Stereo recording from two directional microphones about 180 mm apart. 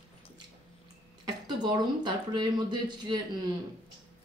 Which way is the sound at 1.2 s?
25° right (ahead or behind).